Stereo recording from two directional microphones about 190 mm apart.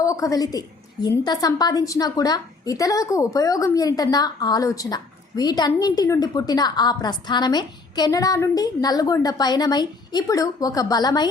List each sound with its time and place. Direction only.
0.0 s a woman's voice: 15° left (ahead or behind)